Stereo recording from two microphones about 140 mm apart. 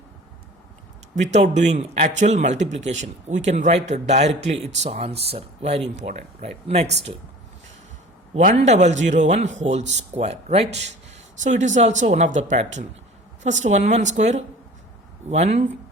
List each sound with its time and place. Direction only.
1.1 s speech: 55° right (ahead or behind)
8.5 s speech: 55° right (ahead or behind)